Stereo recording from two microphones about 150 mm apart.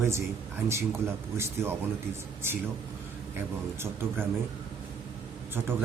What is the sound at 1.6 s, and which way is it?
Speech, 15° right (ahead or behind).